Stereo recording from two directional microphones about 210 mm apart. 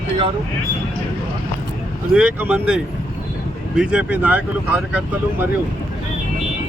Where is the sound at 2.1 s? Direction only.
5° right (ahead or behind).